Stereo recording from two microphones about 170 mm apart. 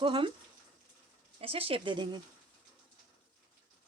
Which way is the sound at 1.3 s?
35° right (ahead or behind).